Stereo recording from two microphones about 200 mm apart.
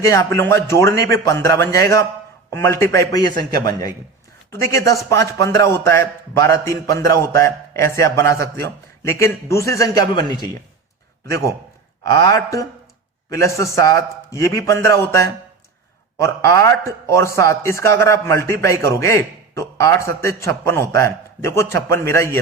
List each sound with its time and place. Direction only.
0.1 s speech: 15° left (ahead or behind)